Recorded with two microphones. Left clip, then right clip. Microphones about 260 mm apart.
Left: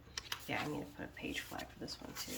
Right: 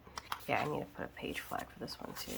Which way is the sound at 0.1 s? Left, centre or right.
Centre.